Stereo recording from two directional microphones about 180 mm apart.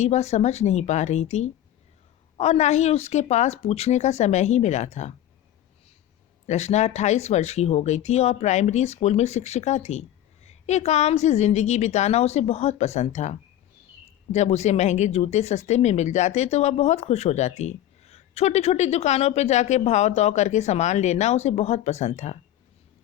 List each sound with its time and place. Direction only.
0.0 s speech: 40° left (ahead or behind)
6.5 s speech: 40° left (ahead or behind)